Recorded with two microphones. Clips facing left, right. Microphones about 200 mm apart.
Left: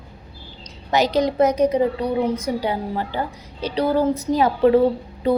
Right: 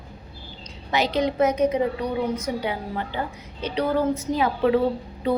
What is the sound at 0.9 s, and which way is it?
A woman's voice, 40° left (ahead or behind).